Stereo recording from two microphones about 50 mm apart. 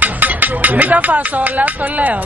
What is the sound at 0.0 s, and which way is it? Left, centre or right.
Speech, right.